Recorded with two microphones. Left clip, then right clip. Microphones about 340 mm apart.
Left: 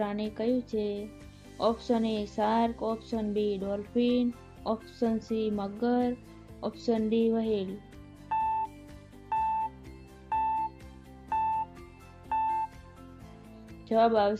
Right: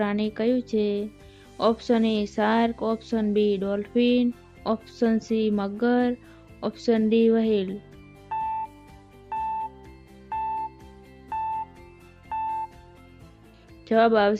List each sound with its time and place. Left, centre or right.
0.0 s speech: right
8.3 s music: centre
12.3 s music: centre
13.8 s speech: right